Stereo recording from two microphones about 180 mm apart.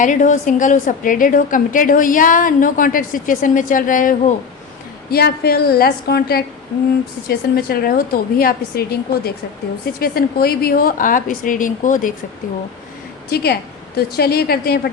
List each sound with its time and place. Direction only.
0.0 s a woman's voice: 45° left (ahead or behind)
5.1 s a woman's voice: 60° left (ahead or behind)
13.3 s a woman's voice: 60° left (ahead or behind)